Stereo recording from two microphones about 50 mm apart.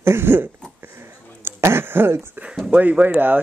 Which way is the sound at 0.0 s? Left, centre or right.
Right.